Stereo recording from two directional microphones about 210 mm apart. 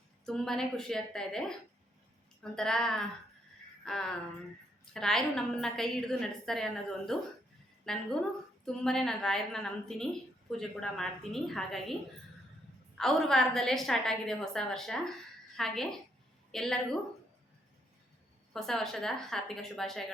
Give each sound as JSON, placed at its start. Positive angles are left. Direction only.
{"t": 0.3, "sound": "a woman's voice", "side_deg": 0}
{"t": 13.0, "sound": "a woman's voice", "side_deg": 0}
{"t": 18.5, "sound": "a woman's voice", "side_deg": 0}